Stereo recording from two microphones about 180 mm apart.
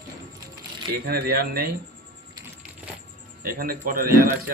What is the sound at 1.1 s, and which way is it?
Speech, 60° right (ahead or behind).